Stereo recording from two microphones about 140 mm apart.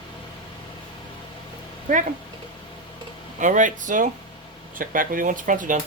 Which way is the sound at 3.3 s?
65° right (ahead or behind).